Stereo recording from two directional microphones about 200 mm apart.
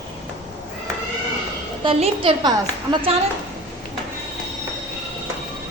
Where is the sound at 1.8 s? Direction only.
25° right (ahead or behind).